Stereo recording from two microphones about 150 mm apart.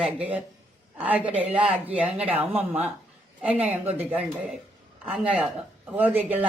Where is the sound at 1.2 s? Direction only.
40° right (ahead or behind).